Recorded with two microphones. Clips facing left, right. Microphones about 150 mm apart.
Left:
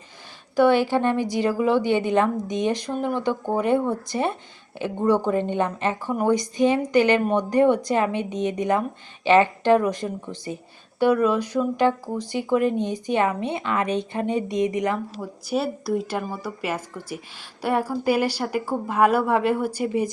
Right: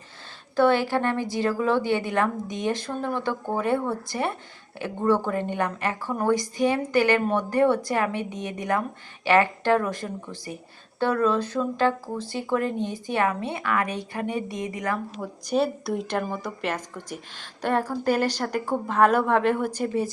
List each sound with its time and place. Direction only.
0.5 s a woman's voice: 15° left (ahead or behind)
15.2 s a woman's voice: 5° left (ahead or behind)